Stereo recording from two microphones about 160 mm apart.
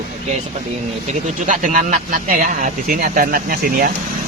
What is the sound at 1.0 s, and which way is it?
Speech, 55° right (ahead or behind).